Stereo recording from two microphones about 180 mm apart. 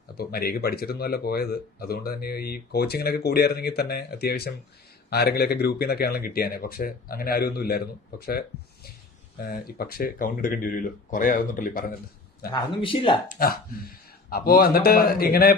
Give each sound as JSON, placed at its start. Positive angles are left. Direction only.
{"t": 0.2, "sound": "speech", "side_deg": 55}
{"t": 12.5, "sound": "a man's voice", "side_deg": 25}
{"t": 13.2, "sound": "speech", "side_deg": 55}